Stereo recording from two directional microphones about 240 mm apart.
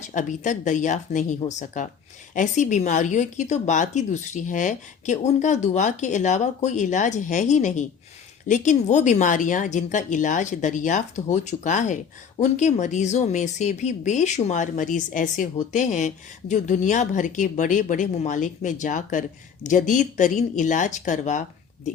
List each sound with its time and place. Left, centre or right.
0.0 s speech: left